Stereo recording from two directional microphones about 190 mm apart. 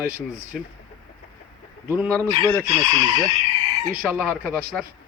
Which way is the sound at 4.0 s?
Centre (ahead or behind).